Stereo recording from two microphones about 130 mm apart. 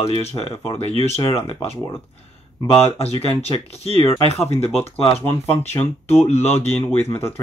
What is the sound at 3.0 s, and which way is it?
Speech, 50° left (ahead or behind).